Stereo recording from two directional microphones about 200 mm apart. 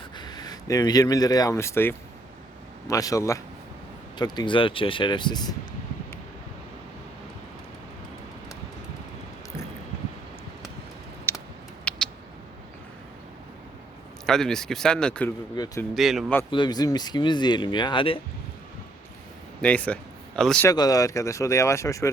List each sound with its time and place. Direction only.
0.2 s speech: 20° left (ahead or behind)
11.3 s a sound: 10° left (ahead or behind)
14.3 s speech: centre (ahead or behind)
15.5 s speech: 15° left (ahead or behind)
16.0 s speech: centre (ahead or behind)
16.5 s speech: 20° left (ahead or behind)
19.6 s speech: 5° left (ahead or behind)
20.7 s speech: 20° left (ahead or behind)